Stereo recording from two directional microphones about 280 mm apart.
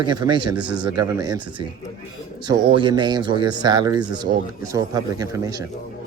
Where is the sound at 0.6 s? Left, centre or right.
Centre.